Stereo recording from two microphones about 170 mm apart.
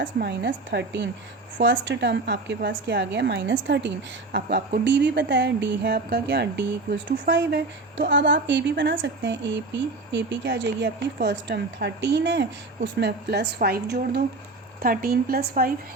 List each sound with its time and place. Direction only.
0.0 s a woman's voice: 85° right; by 14.3 s 70° right (ahead or behind)
14.8 s speech: 60° right (ahead or behind)